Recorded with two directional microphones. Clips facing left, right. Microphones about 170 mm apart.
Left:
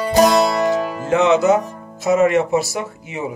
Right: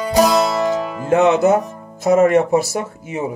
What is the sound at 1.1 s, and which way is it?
Speech, 55° right (ahead or behind).